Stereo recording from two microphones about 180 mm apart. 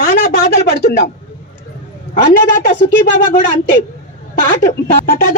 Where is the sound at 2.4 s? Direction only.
70° left (ahead or behind).